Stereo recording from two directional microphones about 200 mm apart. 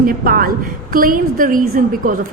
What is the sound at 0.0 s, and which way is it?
A woman's voice, 45° right (ahead or behind).